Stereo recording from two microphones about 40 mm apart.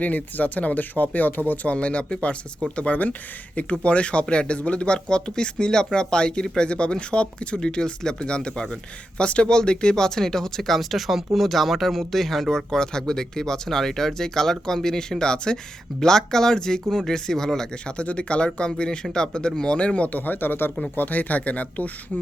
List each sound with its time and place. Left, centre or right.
0.0 s speech: left
1.7 s speech: left; by 17.7 s centre
17.8 s speech: left
20.1 s speech: left
20.9 s speech: left